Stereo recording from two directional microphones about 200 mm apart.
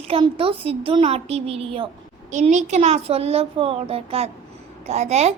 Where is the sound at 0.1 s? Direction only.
25° right (ahead or behind).